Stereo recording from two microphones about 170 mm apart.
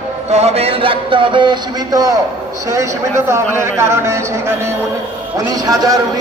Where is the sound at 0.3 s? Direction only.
40° right (ahead or behind); by 4.6 s 15° right (ahead or behind).